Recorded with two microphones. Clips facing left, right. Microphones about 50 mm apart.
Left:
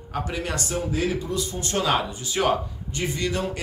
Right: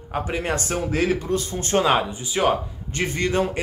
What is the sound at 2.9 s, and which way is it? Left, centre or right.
Speech, right.